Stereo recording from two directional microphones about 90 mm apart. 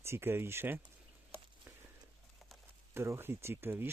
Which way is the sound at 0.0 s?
25° right (ahead or behind).